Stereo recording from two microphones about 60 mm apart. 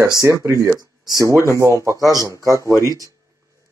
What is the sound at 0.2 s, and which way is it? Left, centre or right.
Speech, right.